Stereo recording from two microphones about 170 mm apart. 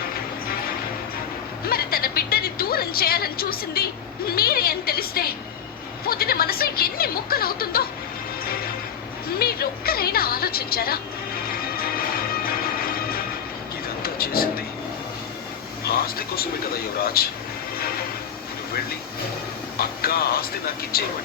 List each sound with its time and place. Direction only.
1.6 s music: 60° left (ahead or behind)
4.3 s speech: 60° left (ahead or behind)
9.4 s a woman's voice: 65° left (ahead or behind)
12.5 s music: 60° left (ahead or behind)
14.0 s a sound: 60° left (ahead or behind)
15.8 s speech: 65° left (ahead or behind)
20.0 s speech: 60° left (ahead or behind)